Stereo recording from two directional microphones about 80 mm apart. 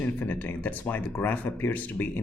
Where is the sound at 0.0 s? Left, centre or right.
Left.